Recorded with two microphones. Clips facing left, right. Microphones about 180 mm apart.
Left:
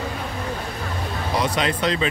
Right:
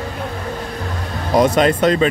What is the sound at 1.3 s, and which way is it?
Speech, 50° right (ahead or behind).